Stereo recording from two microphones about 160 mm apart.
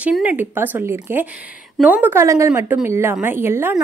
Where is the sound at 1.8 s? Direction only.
10° right (ahead or behind).